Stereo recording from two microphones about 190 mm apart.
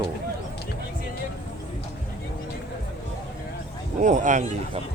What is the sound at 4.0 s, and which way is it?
Speech, 40° right (ahead or behind).